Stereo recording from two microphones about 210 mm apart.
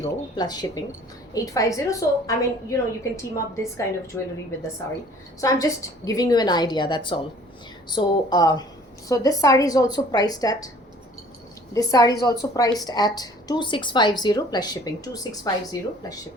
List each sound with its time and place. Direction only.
0.3 s a woman's voice: 20° left (ahead or behind)
11.7 s a woman's voice: 15° left (ahead or behind)